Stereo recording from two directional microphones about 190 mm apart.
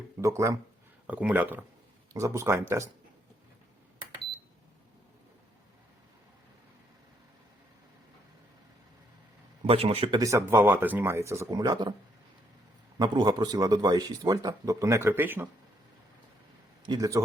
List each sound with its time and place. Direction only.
0.2 s speech: 15° right (ahead or behind)
9.6 s speech: 30° right (ahead or behind)
13.0 s a man's voice: 20° right (ahead or behind)
16.9 s speech: 15° right (ahead or behind)